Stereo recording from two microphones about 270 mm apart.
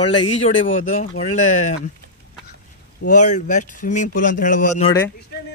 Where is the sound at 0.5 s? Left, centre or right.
Left.